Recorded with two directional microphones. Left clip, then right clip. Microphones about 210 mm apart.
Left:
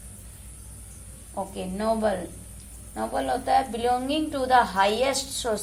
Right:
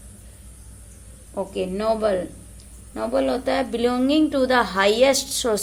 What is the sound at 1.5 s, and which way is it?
A woman's voice, 40° right (ahead or behind).